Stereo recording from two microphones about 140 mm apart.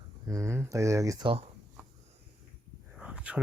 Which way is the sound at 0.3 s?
20° right (ahead or behind).